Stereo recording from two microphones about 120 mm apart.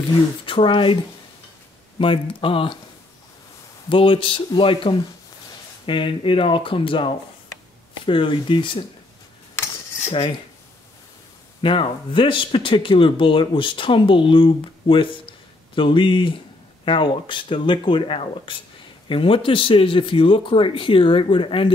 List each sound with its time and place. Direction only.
0.5 s speech: 45° left (ahead or behind)
2.0 s speech: 45° left (ahead or behind)
3.9 s speech: 45° left (ahead or behind)
11.6 s speech: 45° left (ahead or behind)